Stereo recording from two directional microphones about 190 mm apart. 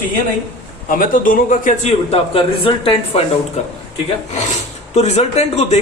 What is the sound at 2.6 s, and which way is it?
Speech, 30° left (ahead or behind).